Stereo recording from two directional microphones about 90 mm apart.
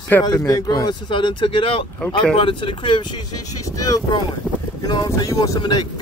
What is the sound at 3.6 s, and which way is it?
Speech, 40° left (ahead or behind).